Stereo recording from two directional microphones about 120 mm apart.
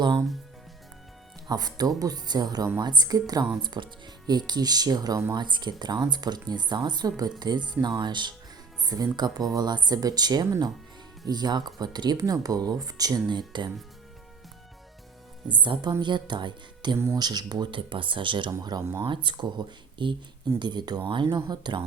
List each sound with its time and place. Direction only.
1.5 s speech: 35° right (ahead or behind)
15.4 s speech: 40° right (ahead or behind)
19.0 s speech: 40° right (ahead or behind)